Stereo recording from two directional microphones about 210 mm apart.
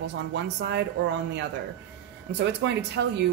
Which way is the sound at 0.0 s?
55° right (ahead or behind).